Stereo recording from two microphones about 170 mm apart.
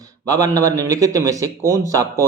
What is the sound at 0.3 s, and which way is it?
A man's voice, 20° right (ahead or behind).